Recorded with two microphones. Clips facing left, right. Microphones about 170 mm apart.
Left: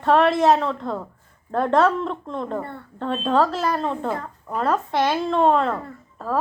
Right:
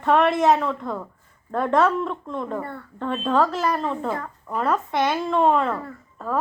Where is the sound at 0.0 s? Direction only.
35° left (ahead or behind).